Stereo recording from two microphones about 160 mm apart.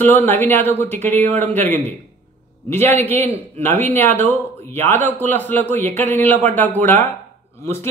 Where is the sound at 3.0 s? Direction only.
15° left (ahead or behind).